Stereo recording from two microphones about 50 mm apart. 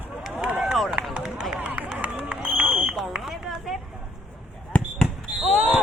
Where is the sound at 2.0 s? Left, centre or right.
Right.